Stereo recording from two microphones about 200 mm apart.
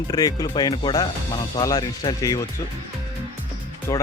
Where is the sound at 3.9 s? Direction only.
15° left (ahead or behind).